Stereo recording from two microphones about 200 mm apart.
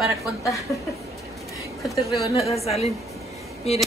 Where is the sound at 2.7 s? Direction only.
30° left (ahead or behind).